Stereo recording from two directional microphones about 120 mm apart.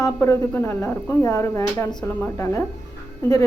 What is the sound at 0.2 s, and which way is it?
A woman's voice, 20° left (ahead or behind).